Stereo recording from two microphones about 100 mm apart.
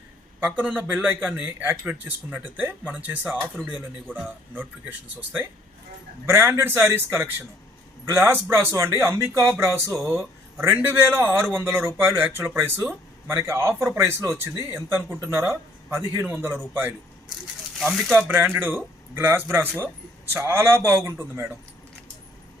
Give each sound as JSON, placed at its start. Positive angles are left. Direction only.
{"t": 0.3, "sound": "a man's voice", "side_deg": -15}
{"t": 9.9, "sound": "speech", "side_deg": 0}
{"t": 10.6, "sound": "a man's voice", "side_deg": -25}
{"t": 17.9, "sound": "speech", "side_deg": 5}
{"t": 18.5, "sound": "a man's voice", "side_deg": -20}